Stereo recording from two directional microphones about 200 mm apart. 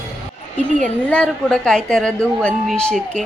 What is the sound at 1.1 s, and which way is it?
A woman's voice, 5° left (ahead or behind).